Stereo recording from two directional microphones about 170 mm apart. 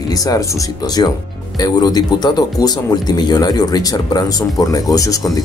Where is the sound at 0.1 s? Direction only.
20° left (ahead or behind).